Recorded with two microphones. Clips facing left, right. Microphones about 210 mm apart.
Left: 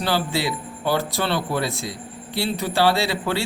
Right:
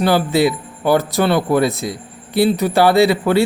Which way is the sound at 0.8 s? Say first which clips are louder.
Right 8 dB; 50° right (ahead or behind).